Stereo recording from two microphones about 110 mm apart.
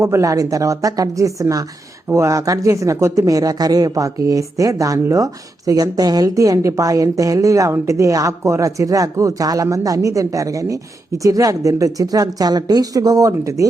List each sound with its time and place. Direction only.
0.0 s speech: 30° right (ahead or behind)